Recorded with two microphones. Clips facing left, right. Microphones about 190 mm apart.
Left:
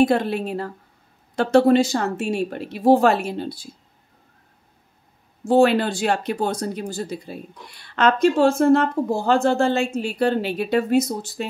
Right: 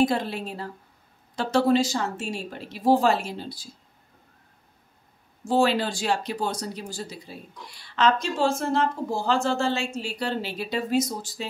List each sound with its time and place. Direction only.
0.0 s speech: 60° left (ahead or behind)
5.5 s speech: 60° left (ahead or behind)